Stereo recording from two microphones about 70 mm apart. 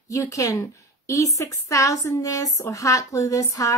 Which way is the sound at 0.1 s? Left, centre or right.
Left.